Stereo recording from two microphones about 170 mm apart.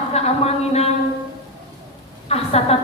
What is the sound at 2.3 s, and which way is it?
Speech, 35° left (ahead or behind).